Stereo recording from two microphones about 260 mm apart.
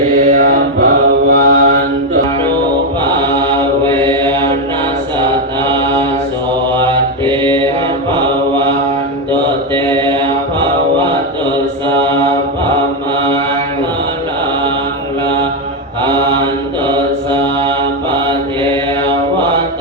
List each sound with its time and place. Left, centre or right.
0.3 s mantra: right